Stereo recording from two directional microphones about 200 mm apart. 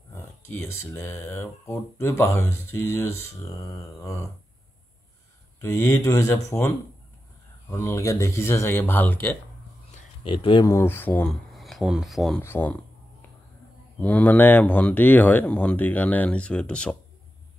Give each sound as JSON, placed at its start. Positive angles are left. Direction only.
{"t": 0.1, "sound": "speech", "side_deg": 10}
{"t": 5.6, "sound": "speech", "side_deg": 15}
{"t": 7.7, "sound": "speech", "side_deg": 15}
{"t": 10.2, "sound": "speech", "side_deg": 25}
{"t": 12.4, "sound": "speech", "side_deg": 10}
{"t": 13.9, "sound": "speech", "side_deg": 10}